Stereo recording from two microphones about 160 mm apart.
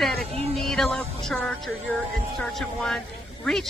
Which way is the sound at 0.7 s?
Centre (ahead or behind).